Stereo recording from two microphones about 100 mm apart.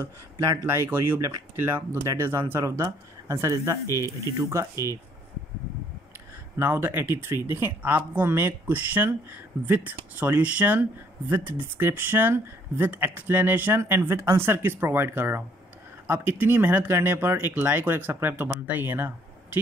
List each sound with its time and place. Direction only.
0.0 s speech: 30° right (ahead or behind)
6.6 s speech: 25° right (ahead or behind)